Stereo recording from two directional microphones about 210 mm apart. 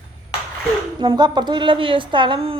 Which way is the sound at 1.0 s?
20° right (ahead or behind).